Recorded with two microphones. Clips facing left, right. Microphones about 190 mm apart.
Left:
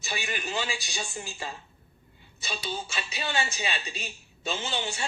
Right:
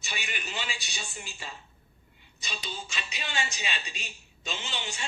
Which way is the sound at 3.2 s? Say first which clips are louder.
Left 5 dB; 35° left (ahead or behind).